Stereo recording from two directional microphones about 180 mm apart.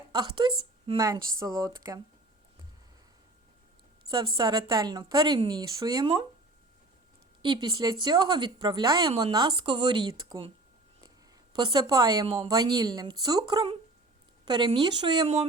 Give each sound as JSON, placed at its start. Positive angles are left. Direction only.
{"t": 0.1, "sound": "a woman's voice", "side_deg": -25}
{"t": 4.1, "sound": "a woman's voice", "side_deg": -25}
{"t": 7.4, "sound": "a woman's voice", "side_deg": -25}
{"t": 11.5, "sound": "a woman's voice", "side_deg": -25}